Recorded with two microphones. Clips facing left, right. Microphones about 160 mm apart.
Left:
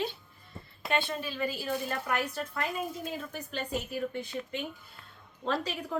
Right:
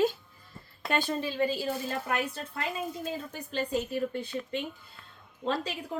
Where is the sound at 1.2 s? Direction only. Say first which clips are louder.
Right 5 dB; 25° right (ahead or behind).